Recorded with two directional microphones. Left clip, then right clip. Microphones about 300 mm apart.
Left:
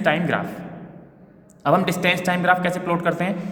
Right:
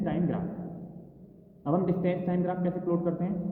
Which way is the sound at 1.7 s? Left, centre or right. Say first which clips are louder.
Left 10 dB; left.